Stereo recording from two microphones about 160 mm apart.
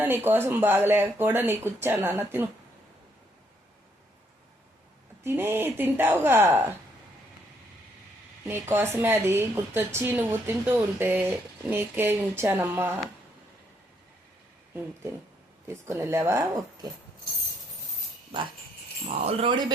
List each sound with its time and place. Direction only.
0.0 s a woman's voice: 15° right (ahead or behind)
5.2 s a woman's voice: 15° right (ahead or behind)
8.4 s a woman's voice: 15° right (ahead or behind)
15.6 s a woman's voice: 15° right (ahead or behind)
19.2 s speech: 35° right (ahead or behind)